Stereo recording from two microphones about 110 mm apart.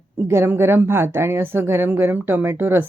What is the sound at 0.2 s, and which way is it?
A woman's voice, 20° right (ahead or behind).